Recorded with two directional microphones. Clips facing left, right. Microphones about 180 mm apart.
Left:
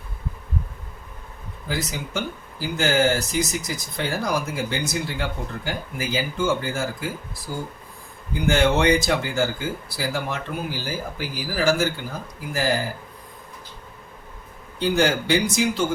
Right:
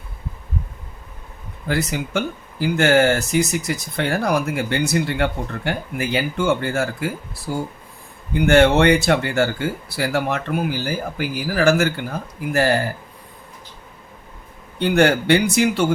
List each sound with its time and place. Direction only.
1.6 s speech: 65° right (ahead or behind)
8.4 s speech: 65° right (ahead or behind)
14.8 s speech: 60° right (ahead or behind)